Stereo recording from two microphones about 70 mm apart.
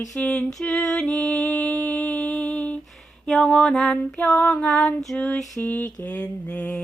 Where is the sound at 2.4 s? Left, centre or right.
Centre.